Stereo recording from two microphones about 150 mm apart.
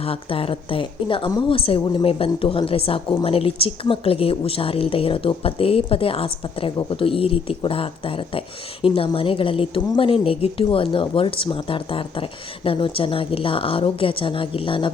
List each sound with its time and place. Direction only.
0.0 s a woman's voice: 40° left (ahead or behind)